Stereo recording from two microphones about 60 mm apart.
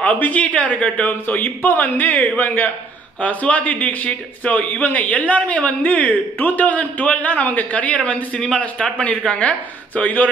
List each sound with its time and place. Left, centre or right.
0.0 s a man's voice: left
1.2 s a man's voice: left